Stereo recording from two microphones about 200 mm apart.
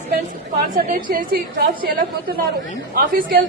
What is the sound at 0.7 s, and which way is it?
Speech, 40° right (ahead or behind).